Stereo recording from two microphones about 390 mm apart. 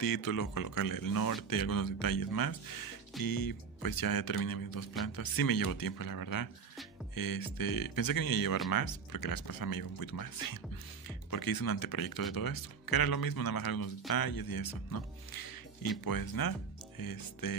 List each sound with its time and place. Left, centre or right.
0.0 s speech: left